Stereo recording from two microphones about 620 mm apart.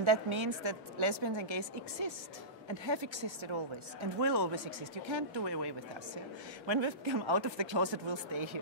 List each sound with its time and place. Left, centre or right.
0.0 s speech: right